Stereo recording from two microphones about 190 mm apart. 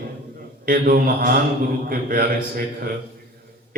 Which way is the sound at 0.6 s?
50° right (ahead or behind).